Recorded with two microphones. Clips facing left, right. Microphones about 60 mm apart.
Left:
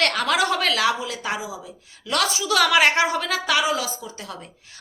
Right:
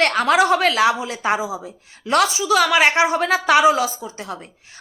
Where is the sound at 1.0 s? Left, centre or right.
Right.